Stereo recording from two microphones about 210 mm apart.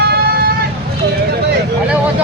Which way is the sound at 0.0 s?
50° right (ahead or behind).